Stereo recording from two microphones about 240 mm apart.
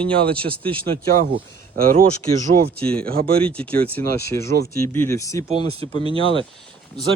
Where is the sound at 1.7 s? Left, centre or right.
Right.